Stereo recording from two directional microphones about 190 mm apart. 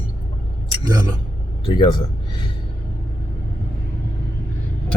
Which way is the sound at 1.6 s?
25° left (ahead or behind).